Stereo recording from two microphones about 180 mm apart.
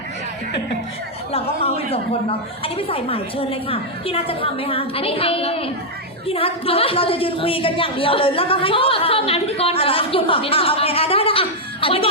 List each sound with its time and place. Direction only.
1.3 s a woman's voice: 35° left (ahead or behind)